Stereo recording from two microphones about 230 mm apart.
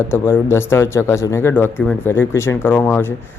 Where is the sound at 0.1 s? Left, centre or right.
Centre.